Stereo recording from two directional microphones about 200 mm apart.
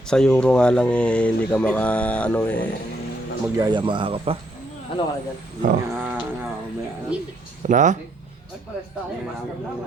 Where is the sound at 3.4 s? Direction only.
15° right (ahead or behind).